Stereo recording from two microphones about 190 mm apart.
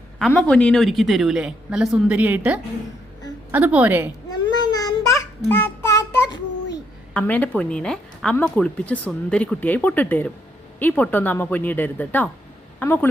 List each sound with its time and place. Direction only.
0.2 s a woman's voice: 5° left (ahead or behind); by 4.1 s 10° right (ahead or behind)
4.3 s child singing: 20° left (ahead or behind)
7.1 s a woman's voice: 5° left (ahead or behind)